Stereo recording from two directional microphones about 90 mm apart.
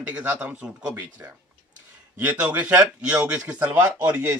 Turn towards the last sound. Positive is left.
turn(degrees=-20)  # may be behind; listen again after turning